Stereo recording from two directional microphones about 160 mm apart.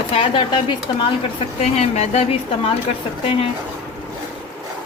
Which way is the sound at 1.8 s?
45° left (ahead or behind).